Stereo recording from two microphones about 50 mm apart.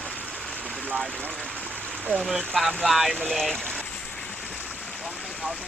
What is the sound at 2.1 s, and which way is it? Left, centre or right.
Speech, right.